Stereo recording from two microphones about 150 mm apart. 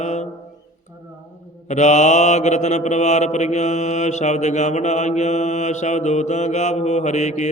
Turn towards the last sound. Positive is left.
turn(degrees=50)  # may be behind; listen again after turning